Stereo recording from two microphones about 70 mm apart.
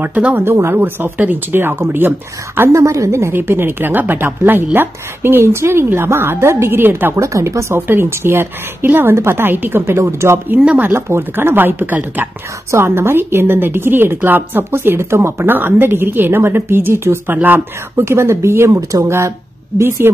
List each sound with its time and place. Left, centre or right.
0.0 s speech: right
0.5 s a woman's voice: right
0.7 s a woman's voice: right
2.7 s a woman's voice: right
7.2 s speech: right
7.8 s a woman's voice: right
10.5 s speech: centre
10.9 s a woman's voice: right
15.4 s a woman's voice: right
18.0 s a woman's voice: right
18.8 s speech: right
19.0 s a woman's voice: right